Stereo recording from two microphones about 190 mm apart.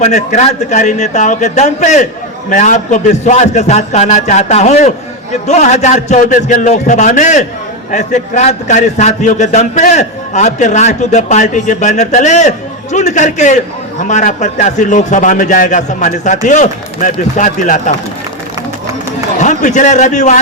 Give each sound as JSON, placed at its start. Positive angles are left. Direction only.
{"t": 0.0, "sound": "a man's voice", "side_deg": 35}
{"t": 19.4, "sound": "a man's voice", "side_deg": 40}